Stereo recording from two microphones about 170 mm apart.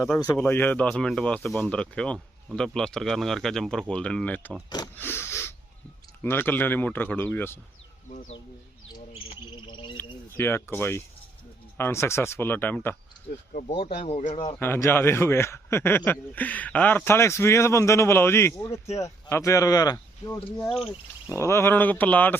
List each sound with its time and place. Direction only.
0.3 s a man's voice: 10° left (ahead or behind)
8.9 s cricket: 25° left (ahead or behind)
10.0 s a man's voice: 15° left (ahead or behind)
13.5 s speech: 45° left (ahead or behind)
14.6 s a man's voice: 15° left (ahead or behind)